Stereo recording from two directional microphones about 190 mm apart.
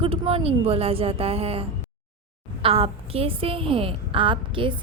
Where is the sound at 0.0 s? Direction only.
30° right (ahead or behind).